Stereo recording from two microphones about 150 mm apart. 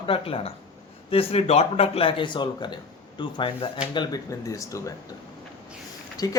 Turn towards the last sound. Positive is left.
turn(degrees=25)  # may be behind; listen again after turning